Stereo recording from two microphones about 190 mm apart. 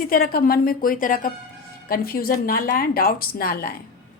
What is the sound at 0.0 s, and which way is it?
A woman's voice, 50° left (ahead or behind).